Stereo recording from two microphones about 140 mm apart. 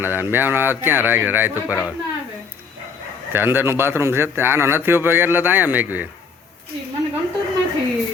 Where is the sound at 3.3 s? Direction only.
15° right (ahead or behind).